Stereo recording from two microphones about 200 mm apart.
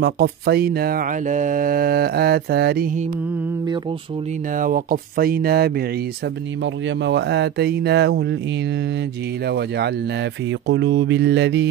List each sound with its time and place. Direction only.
0.0 s mantra: 55° right (ahead or behind)
4.6 s mantra: 45° right (ahead or behind)
6.6 s speech: 60° right (ahead or behind)
9.5 s speech: 55° right (ahead or behind)